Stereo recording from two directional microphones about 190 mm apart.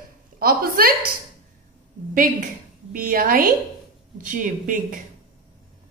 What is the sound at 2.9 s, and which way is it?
Speech, 45° right (ahead or behind).